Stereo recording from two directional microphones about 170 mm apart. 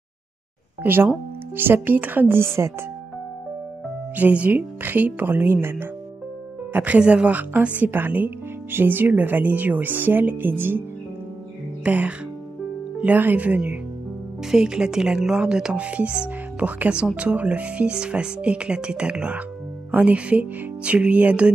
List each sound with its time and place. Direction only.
0.8 s speech: 10° right (ahead or behind)
4.2 s speech: 10° right (ahead or behind)
11.8 s speech: 10° right (ahead or behind)